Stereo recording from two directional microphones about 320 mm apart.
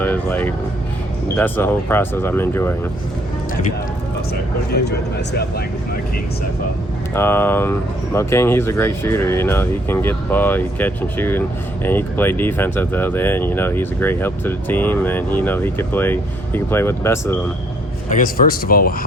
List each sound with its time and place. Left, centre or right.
0.0 s speech: centre
4.7 s speech: left
7.1 s speech: centre
18.1 s speech: left